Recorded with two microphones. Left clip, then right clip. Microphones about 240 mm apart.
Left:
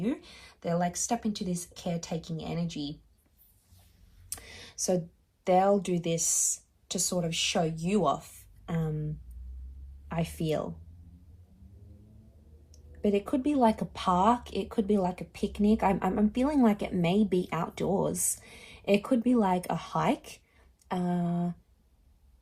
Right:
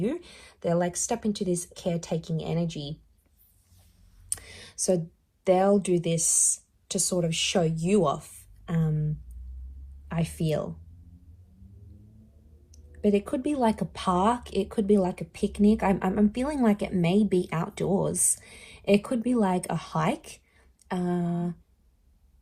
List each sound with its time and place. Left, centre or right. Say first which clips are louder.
0.0 s speech: right 3 dB; right
4.3 s speech: right 3 dB; right
13.0 s speech: right 3 dB; right